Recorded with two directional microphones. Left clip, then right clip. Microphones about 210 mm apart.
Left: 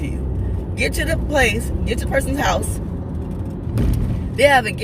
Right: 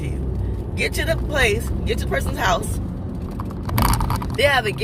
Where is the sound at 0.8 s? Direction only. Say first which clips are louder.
Left 1 dB; 10° left (ahead or behind).